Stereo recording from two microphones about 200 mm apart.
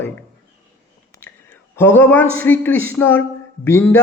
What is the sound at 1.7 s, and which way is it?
Speech, 10° left (ahead or behind).